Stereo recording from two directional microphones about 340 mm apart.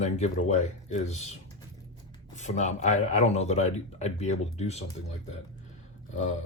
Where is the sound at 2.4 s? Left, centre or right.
Left.